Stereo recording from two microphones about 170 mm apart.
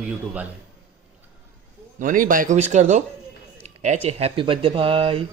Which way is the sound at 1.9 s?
50° right (ahead or behind).